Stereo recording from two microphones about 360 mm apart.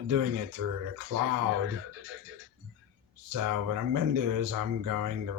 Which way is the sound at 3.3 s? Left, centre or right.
Right.